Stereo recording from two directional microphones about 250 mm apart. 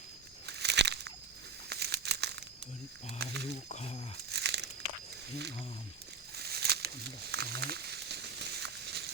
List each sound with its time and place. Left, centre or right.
0.4 s a sound: right
1.7 s crumpling: right
3.2 s speech: right
3.7 s speech: left
4.3 s crumpling: right
6.3 s wild animals: right